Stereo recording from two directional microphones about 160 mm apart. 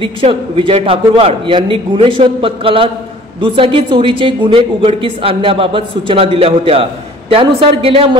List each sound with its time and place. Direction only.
0.0 s a woman's voice: 35° right (ahead or behind)